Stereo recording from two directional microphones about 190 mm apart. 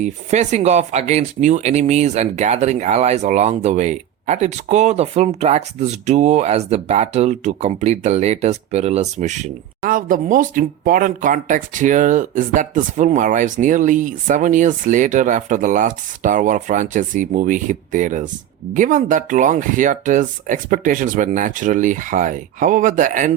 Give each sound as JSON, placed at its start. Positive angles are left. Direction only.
{"t": 0.0, "sound": "speech", "side_deg": -35}